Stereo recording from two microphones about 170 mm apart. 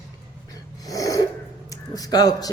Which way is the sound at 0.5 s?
20° left (ahead or behind).